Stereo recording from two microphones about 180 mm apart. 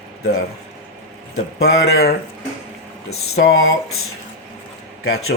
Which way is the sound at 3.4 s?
70° left (ahead or behind).